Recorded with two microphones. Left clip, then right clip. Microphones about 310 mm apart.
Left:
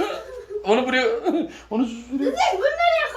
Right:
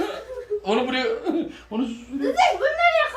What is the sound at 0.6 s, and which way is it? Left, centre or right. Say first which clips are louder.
Speech: left 4 dB; centre.